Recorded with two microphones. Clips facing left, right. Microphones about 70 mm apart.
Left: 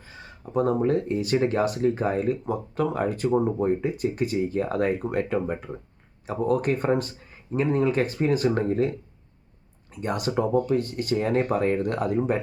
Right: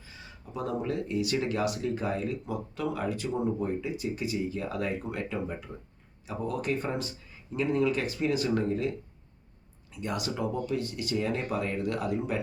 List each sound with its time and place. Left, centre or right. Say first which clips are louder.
0.0 s speech: left 6 dB; left